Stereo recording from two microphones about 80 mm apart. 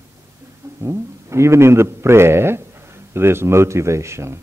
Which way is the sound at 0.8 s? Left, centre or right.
Right.